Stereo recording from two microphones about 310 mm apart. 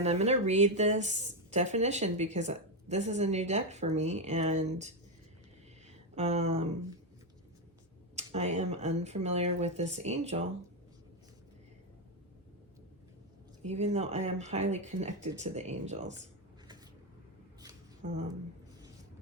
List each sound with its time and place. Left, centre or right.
0.0 s a woman's voice: right
6.1 s a woman's voice: right
8.1 s a woman's voice: right
13.7 s a woman's voice: right